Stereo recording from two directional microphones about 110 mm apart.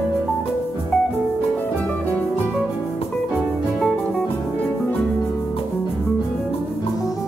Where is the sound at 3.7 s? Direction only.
10° left (ahead or behind).